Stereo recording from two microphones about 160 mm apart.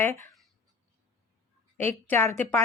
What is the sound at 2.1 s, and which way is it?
Speech, 15° left (ahead or behind).